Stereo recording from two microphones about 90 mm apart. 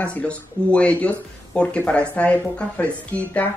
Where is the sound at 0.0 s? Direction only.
15° left (ahead or behind).